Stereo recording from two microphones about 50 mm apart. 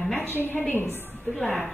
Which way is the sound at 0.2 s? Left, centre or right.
Left.